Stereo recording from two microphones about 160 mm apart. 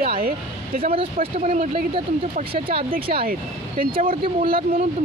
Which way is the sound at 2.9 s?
70° right (ahead or behind).